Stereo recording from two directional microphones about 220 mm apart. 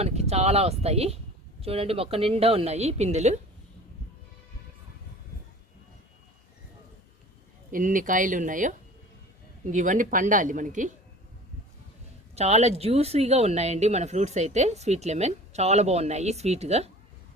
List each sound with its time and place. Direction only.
0.0 s speech: 30° right (ahead or behind)
7.7 s speech: 35° right (ahead or behind)
12.3 s speech: 30° right (ahead or behind)